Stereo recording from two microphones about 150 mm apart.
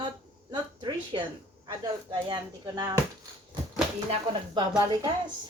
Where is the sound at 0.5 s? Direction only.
30° right (ahead or behind).